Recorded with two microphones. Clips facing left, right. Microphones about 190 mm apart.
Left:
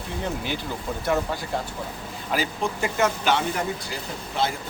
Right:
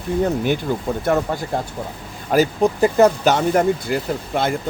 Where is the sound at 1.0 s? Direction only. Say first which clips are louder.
Right 4 dB; 50° right (ahead or behind).